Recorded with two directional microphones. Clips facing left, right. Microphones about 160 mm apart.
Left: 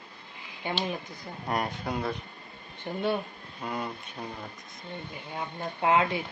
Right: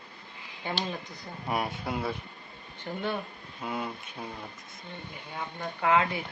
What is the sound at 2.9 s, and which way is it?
Speech, 20° left (ahead or behind).